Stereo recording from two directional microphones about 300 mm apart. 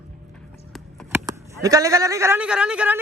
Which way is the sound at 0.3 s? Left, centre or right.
Centre.